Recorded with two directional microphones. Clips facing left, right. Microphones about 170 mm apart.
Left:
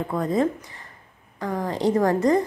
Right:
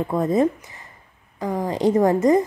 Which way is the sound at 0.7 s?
20° right (ahead or behind).